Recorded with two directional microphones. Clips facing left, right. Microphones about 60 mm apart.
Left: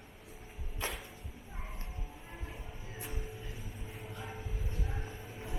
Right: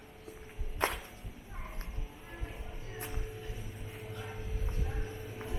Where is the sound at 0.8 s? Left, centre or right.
Right.